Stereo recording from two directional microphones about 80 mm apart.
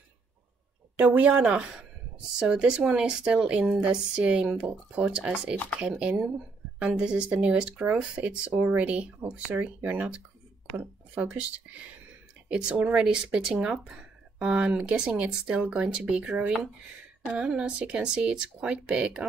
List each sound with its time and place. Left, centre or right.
0.9 s speech: centre